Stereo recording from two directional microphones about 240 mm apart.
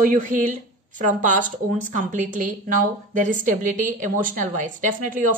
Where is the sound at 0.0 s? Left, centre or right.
Right.